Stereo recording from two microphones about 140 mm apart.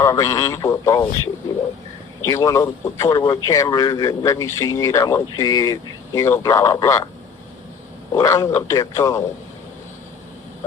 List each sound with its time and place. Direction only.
0.0 s a man's voice: 25° left (ahead or behind)
2.3 s a man's voice: 20° left (ahead or behind)
8.1 s a man's voice: 25° left (ahead or behind)